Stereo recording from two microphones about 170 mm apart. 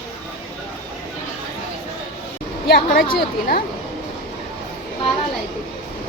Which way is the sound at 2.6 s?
65° left (ahead or behind).